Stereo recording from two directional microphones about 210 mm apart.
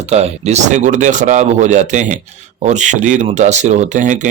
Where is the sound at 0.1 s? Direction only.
30° right (ahead or behind).